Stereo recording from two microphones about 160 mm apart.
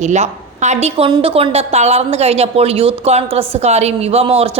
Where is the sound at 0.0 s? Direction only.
45° right (ahead or behind).